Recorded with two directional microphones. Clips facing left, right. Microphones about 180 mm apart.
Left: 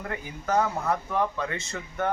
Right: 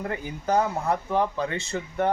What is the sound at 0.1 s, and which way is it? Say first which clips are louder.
Speech: right 1 dB; 30° right (ahead or behind).